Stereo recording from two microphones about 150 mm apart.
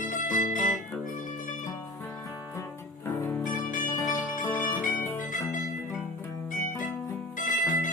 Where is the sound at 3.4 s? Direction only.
60° left (ahead or behind).